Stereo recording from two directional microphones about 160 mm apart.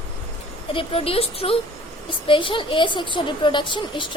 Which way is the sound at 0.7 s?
35° left (ahead or behind).